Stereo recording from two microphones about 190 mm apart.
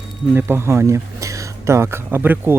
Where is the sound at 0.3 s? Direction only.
10° right (ahead or behind).